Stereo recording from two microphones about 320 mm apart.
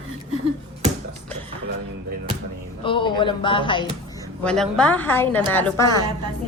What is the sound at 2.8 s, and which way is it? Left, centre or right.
Speech, centre.